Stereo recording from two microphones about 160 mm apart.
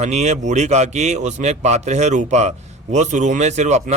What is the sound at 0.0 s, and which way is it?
A man's voice, 45° right (ahead or behind).